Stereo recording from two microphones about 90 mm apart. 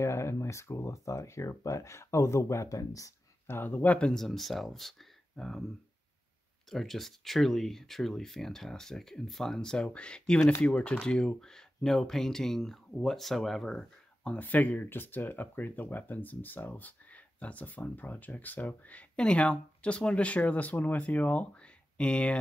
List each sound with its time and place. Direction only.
0.0 s speech: 30° left (ahead or behind)
3.4 s speech: 25° left (ahead or behind); by 5.7 s 5° left (ahead or behind)
6.7 s speech: 5° left (ahead or behind)